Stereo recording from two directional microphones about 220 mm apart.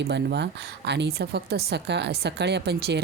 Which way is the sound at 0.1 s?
50° right (ahead or behind).